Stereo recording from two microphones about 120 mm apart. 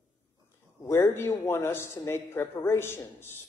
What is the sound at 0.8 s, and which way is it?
Speech, 20° left (ahead or behind).